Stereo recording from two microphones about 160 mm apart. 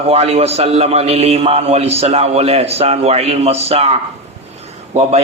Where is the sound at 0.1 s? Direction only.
40° right (ahead or behind).